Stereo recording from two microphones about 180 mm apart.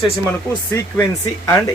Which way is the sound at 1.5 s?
15° left (ahead or behind).